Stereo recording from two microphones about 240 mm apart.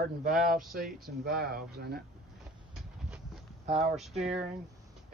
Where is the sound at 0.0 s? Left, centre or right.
Right.